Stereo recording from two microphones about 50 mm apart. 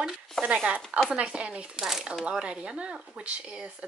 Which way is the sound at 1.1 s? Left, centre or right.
Right.